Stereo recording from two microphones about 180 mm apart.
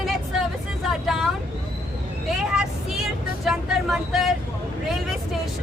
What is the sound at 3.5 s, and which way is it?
Vehicle, centre (ahead or behind).